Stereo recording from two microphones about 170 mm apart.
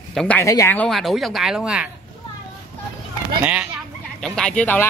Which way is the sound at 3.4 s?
5° right (ahead or behind).